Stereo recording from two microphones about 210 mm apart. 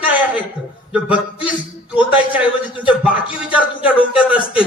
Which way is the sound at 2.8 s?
5° right (ahead or behind).